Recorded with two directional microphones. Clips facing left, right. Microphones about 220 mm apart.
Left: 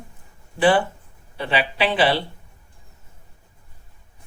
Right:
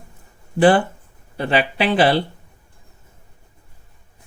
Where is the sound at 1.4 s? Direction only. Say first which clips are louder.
Right 3 dB; 45° right (ahead or behind).